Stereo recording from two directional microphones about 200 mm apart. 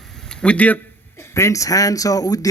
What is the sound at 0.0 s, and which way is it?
A man's voice, centre (ahead or behind).